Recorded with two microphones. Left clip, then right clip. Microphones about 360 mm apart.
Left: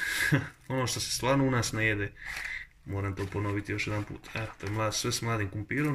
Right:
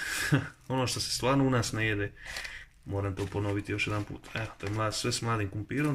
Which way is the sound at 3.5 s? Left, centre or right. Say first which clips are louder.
Right 1 dB; centre.